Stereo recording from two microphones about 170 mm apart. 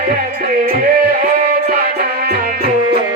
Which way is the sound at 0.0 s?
55° right (ahead or behind).